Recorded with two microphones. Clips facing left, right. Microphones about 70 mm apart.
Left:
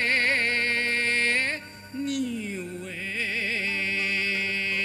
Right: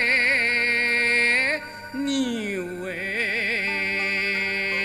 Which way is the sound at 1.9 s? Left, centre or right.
Right.